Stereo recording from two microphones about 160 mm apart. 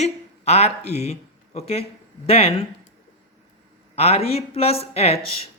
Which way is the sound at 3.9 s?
40° left (ahead or behind).